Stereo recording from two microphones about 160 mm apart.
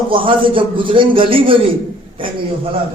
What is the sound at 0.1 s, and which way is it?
A man's voice, 35° right (ahead or behind).